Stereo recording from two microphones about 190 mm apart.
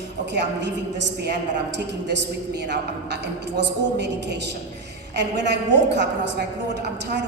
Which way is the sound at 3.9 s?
65° right (ahead or behind).